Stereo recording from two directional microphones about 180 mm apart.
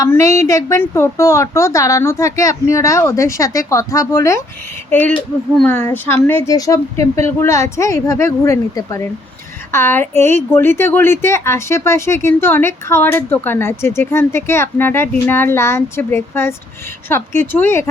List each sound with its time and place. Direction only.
0.0 s a woman's voice: 15° left (ahead or behind)